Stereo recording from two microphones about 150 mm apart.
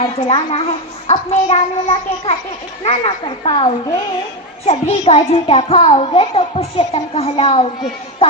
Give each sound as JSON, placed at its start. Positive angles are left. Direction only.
{"t": 0.3, "sound": "a child's voice", "side_deg": 40}